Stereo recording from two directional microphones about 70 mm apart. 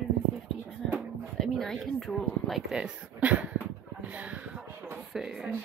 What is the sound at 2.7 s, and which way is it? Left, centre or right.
Speech, centre.